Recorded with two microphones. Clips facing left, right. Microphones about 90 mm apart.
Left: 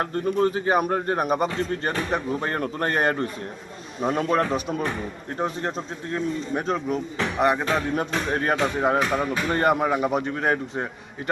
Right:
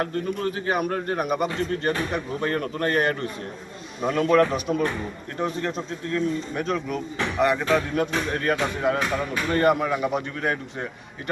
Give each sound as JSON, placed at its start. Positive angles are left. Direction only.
{"t": 0.0, "sound": "a man's voice", "side_deg": 30}